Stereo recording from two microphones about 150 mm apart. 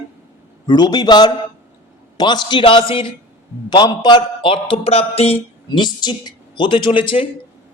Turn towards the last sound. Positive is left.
turn(degrees=35)  # may be behind; listen again after turning